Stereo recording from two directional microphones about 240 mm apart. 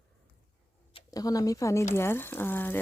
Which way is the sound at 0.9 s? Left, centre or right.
Centre.